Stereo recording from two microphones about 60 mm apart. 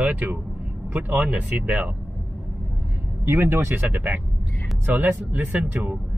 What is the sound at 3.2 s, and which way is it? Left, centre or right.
Speech, right.